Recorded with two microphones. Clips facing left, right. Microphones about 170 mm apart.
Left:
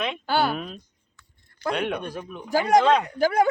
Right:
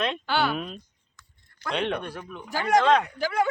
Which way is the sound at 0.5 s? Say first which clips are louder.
Even; centre (ahead or behind).